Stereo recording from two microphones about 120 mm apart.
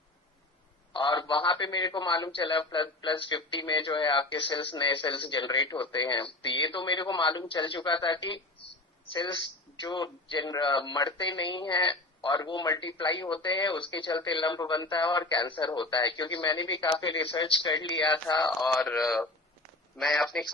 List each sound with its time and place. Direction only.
0.9 s speech: 45° left (ahead or behind)
18.7 s speech: centre (ahead or behind)